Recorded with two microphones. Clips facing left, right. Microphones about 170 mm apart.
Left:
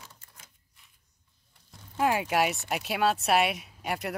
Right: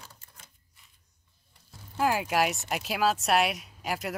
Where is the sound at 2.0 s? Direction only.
Centre (ahead or behind).